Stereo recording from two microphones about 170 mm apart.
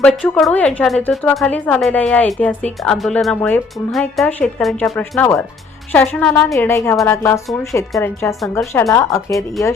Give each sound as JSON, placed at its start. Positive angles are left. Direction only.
{"t": 0.0, "sound": "a woman's voice", "side_deg": 5}